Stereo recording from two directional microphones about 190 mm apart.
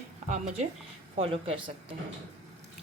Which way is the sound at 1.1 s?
30° right (ahead or behind).